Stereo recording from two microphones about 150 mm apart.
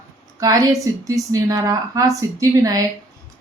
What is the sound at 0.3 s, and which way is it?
A woman's voice, 25° right (ahead or behind).